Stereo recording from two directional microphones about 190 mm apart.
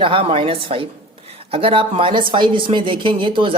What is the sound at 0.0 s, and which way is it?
Speech, 30° right (ahead or behind).